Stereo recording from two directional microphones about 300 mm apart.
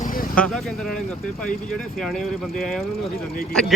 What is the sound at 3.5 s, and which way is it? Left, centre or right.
Speech, centre.